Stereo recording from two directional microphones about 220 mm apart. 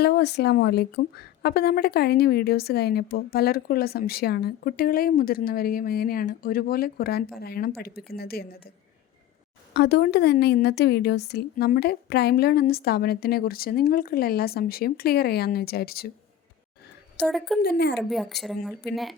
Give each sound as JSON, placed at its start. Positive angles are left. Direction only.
{"t": 0.0, "sound": "a woman's voice", "side_deg": 45}
{"t": 9.7, "sound": "a woman's voice", "side_deg": 50}
{"t": 17.2, "sound": "speech", "side_deg": 0}
{"t": 17.6, "sound": "a woman's voice", "side_deg": 50}
{"t": 17.9, "sound": "speech", "side_deg": 0}